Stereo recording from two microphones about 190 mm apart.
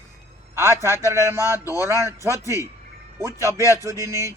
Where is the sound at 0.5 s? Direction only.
15° right (ahead or behind).